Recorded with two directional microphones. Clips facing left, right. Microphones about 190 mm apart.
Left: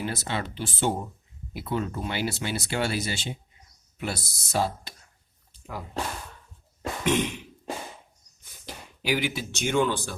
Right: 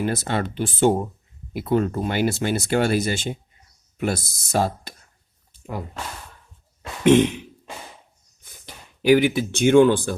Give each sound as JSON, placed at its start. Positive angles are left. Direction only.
{"t": 0.0, "sound": "speech", "side_deg": -50}
{"t": 7.0, "sound": "a sound", "side_deg": -50}
{"t": 9.0, "sound": "speech", "side_deg": -55}